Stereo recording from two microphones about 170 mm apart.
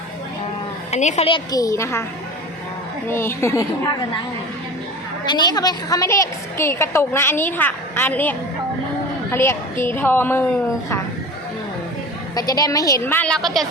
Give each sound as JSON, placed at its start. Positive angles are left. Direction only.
{"t": 0.9, "sound": "a woman's voice", "side_deg": 45}
{"t": 1.5, "sound": "a woman's voice", "side_deg": 20}
{"t": 3.1, "sound": "a woman's voice", "side_deg": 15}
{"t": 5.2, "sound": "a woman's voice", "side_deg": 25}
{"t": 12.4, "sound": "a woman's voice", "side_deg": 20}